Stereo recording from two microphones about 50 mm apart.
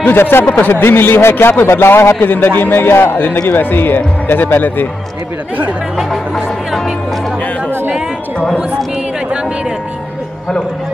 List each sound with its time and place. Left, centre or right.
0.1 s speech: left
1.7 s speech: left
2.2 s speech: left